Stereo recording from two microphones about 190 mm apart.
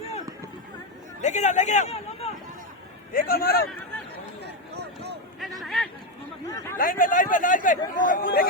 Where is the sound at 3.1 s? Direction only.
50° left (ahead or behind).